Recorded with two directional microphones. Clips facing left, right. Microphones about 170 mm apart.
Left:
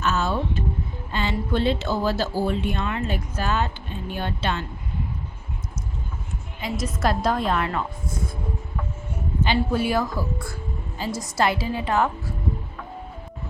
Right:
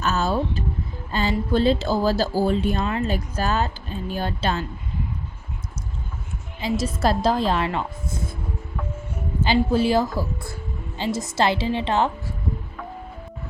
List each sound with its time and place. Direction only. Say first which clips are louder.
0.0 s music: right 1 dB; 40° right (ahead or behind)
1.1 s speech: right 3 dB; 40° right (ahead or behind)
6.6 s a woman's voice: right 3 dB; 30° right (ahead or behind)
9.4 s a woman's voice: right 3 dB; 30° right (ahead or behind)